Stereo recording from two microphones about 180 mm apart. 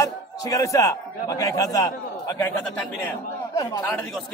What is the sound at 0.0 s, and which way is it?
A man's voice, 20° left (ahead or behind).